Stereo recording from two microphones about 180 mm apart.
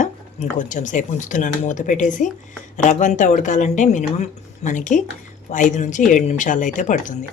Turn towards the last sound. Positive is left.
turn(degrees=45)  # may be behind; listen again after turning